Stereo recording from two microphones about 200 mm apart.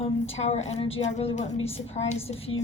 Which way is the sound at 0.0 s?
30° left (ahead or behind).